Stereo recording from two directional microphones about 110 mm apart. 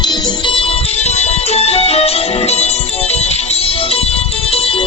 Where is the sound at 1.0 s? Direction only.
80° left.